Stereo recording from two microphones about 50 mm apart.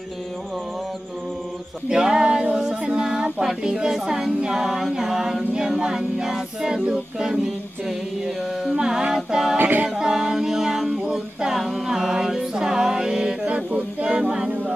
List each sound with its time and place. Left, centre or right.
1.9 s a capella: centre
8.6 s a capella: centre
9.6 s a capella: right
9.8 s a capella: centre
11.6 s music: centre